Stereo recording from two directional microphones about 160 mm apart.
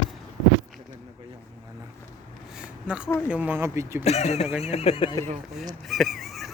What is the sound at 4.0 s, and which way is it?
Speech, 45° left (ahead or behind).